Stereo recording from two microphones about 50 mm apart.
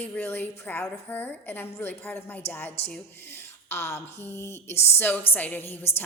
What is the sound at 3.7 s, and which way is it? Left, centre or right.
Speech, left.